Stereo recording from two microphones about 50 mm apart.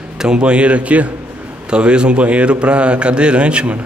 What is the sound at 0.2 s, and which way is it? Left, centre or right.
A man's voice, centre.